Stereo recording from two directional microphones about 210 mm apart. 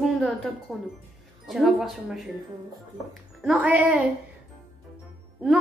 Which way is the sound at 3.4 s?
5° right (ahead or behind).